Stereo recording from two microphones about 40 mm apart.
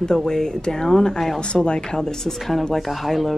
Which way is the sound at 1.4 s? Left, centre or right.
Left.